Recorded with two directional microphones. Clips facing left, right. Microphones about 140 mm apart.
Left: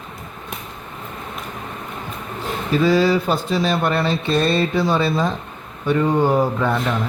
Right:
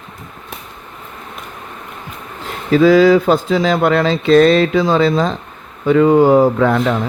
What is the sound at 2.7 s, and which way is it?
Speech, 90° right.